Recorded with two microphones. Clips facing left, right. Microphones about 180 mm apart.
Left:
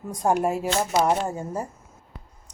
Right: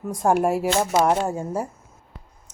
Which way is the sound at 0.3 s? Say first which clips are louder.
Right 3 dB; 10° right (ahead or behind).